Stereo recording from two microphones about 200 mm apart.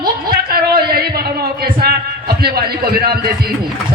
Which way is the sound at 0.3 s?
50° right (ahead or behind).